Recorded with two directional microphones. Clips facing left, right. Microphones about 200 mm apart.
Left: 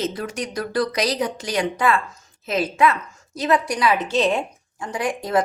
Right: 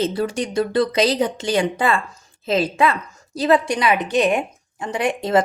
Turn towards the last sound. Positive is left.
turn(degrees=-25)  # may be behind; listen again after turning